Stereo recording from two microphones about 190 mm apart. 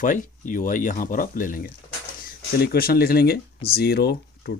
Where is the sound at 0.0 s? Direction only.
45° left (ahead or behind).